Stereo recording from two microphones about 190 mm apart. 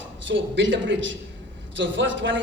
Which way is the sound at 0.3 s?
75° right (ahead or behind).